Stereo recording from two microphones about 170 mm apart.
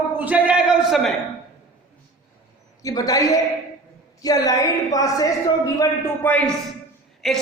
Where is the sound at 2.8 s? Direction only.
20° left (ahead or behind).